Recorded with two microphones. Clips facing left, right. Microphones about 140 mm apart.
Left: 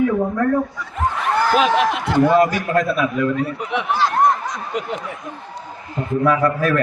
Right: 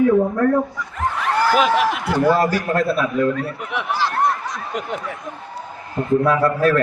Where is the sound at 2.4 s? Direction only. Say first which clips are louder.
Left 2 dB; 30° right (ahead or behind).